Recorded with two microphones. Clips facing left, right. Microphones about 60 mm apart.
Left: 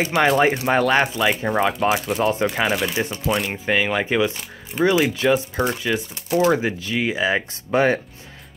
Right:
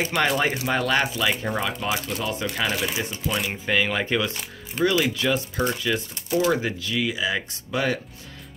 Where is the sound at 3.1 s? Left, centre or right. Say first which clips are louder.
Left 4 dB; centre.